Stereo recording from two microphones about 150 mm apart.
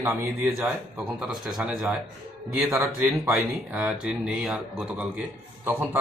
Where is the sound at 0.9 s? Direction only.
5° right (ahead or behind).